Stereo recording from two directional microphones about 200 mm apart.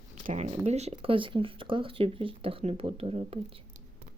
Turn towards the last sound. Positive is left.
turn(degrees=-30)  # may be behind; listen again after turning